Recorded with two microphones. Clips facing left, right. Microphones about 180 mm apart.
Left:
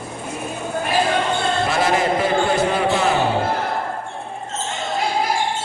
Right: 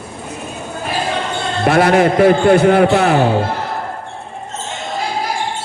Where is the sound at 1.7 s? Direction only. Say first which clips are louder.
Right 10 dB; 65° right (ahead or behind).